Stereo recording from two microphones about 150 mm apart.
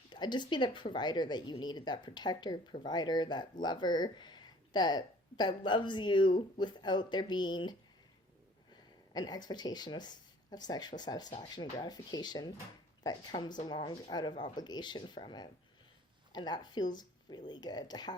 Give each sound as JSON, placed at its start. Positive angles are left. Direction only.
{"t": 0.1, "sound": "speech", "side_deg": 30}
{"t": 9.1, "sound": "speech", "side_deg": 25}